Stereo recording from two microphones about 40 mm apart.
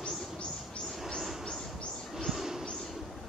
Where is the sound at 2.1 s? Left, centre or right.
Centre.